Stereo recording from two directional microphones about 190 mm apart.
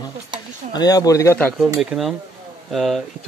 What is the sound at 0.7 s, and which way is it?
Speech, 20° left (ahead or behind).